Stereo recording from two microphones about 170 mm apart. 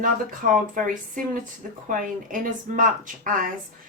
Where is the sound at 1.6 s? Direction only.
55° right (ahead or behind).